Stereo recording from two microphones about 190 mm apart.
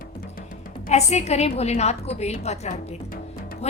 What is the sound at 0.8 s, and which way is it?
A woman's voice, 35° left (ahead or behind).